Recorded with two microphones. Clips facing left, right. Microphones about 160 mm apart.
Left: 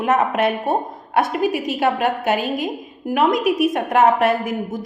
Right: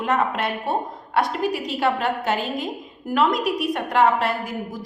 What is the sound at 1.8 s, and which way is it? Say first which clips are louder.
A woman's voice: left 3 dB; 15° left (ahead or behind).